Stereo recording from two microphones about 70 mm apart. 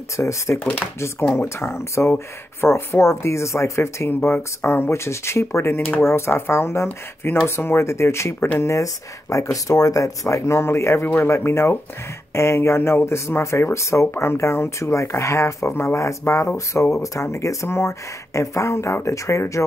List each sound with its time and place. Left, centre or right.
0.2 s speech: left
1.4 s speech: left